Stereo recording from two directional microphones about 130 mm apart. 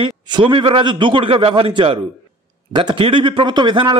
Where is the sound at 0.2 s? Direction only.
35° right (ahead or behind).